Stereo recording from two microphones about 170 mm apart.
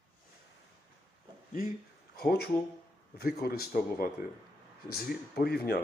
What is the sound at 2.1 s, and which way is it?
Speech, 65° left (ahead or behind).